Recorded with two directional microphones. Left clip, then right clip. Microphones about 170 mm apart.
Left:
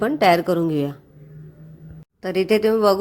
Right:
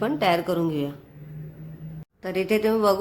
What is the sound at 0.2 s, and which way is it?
Speech, 35° left (ahead or behind).